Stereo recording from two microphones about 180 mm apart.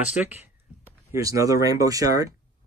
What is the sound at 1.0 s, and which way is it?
Speech, 20° right (ahead or behind).